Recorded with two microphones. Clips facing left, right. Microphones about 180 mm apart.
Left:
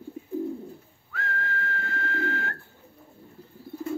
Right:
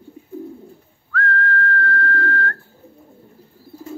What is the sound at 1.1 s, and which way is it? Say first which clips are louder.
Whistling: right 10 dB; 15° left (ahead or behind).